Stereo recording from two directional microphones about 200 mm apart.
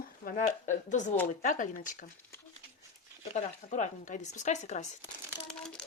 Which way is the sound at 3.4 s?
35° left (ahead or behind).